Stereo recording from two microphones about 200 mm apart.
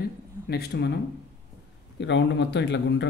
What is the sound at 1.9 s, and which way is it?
Speech, 65° left (ahead or behind).